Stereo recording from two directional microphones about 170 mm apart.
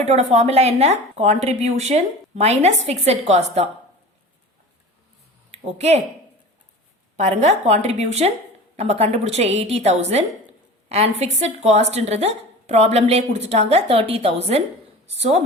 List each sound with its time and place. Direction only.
0.0 s speech: 40° right (ahead or behind)
5.5 s speech: 40° right (ahead or behind)
7.2 s speech: 45° right (ahead or behind)